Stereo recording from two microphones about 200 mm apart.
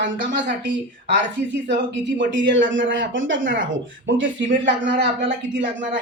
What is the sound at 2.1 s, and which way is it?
Speech, 65° right (ahead or behind).